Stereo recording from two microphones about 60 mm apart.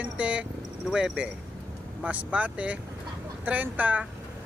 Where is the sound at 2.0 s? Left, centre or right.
Right.